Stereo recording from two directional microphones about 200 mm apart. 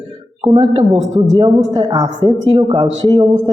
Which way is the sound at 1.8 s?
20° right (ahead or behind).